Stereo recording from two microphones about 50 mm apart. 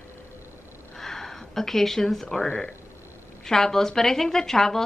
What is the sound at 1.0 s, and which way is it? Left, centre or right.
A woman's voice, centre.